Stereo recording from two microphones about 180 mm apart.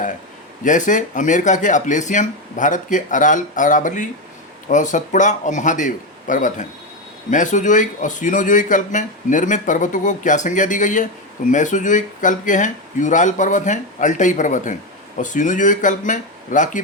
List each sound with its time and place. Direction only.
0.6 s speech: 45° left (ahead or behind)